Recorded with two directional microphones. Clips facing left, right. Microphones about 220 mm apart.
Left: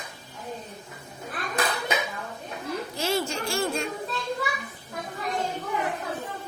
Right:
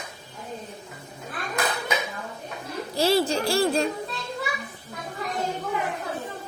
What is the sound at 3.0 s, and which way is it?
Speech, 35° right (ahead or behind).